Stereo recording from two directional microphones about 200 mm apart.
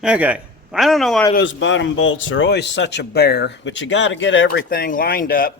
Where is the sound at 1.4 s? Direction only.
70° left (ahead or behind).